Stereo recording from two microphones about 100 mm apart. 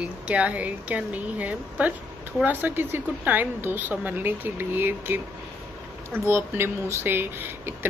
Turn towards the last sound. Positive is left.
turn(degrees=-20)  # may be behind; listen again after turning